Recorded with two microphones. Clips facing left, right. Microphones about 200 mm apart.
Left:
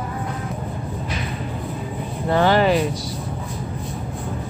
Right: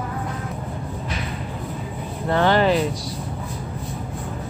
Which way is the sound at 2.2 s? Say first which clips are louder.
Left 1 dB; 5° left (ahead or behind).